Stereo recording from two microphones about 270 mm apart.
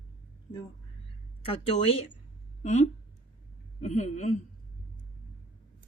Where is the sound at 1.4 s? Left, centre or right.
Left.